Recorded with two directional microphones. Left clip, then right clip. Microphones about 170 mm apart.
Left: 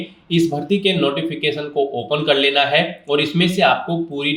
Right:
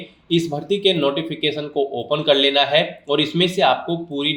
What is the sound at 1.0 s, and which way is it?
Speech, 40° right (ahead or behind).